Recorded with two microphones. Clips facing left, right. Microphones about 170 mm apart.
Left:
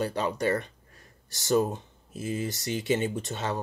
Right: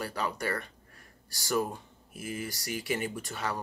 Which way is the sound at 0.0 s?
25° left (ahead or behind).